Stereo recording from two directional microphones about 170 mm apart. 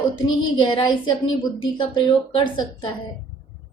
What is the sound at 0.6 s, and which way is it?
Speech, 25° left (ahead or behind).